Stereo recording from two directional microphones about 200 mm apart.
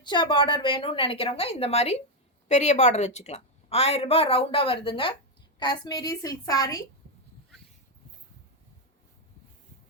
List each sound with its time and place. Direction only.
0.0 s a woman's voice: 25° left (ahead or behind)